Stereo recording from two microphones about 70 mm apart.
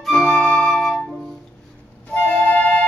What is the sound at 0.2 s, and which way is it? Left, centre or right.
Flute, centre.